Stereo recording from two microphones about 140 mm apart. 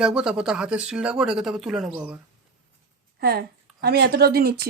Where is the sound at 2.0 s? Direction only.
15° right (ahead or behind).